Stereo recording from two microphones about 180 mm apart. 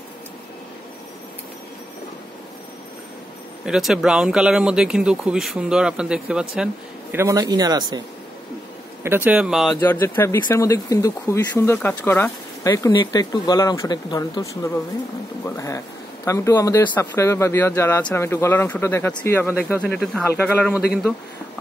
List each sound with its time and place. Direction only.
3.6 s speech: 5° right (ahead or behind); by 8.0 s 20° right (ahead or behind)
9.0 s speech: 10° right (ahead or behind)
9.8 s speech: 15° left (ahead or behind)